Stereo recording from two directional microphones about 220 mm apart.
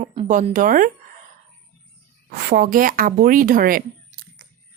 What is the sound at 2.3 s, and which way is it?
A woman's voice, 40° right (ahead or behind).